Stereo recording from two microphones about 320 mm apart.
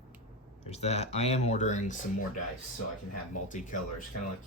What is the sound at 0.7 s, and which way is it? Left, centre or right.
Speech, centre.